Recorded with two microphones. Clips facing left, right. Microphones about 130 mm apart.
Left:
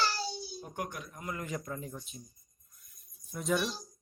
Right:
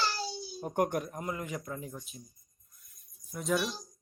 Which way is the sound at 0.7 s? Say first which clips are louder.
Right 11 dB; 50° right (ahead or behind).